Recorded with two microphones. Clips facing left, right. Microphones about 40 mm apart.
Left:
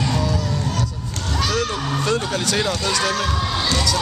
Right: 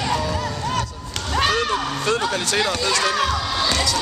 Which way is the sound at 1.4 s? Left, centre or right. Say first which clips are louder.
Right 3 dB; right.